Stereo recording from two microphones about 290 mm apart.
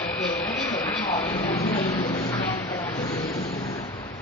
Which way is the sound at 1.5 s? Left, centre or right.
Left.